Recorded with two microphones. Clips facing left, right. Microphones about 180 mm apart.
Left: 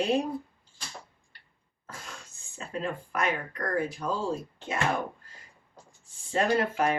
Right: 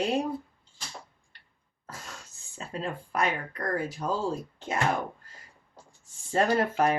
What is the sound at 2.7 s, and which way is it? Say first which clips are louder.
Speech: right 1 dB; 35° right (ahead or behind).